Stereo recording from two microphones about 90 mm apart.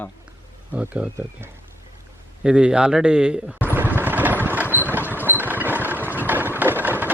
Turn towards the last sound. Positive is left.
turn(degrees=-20)  # may be behind; listen again after turning